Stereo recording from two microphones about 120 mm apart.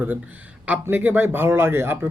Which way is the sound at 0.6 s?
15° right (ahead or behind).